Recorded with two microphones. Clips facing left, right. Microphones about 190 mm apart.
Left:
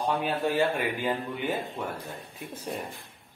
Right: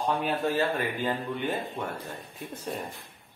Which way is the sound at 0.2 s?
15° left (ahead or behind).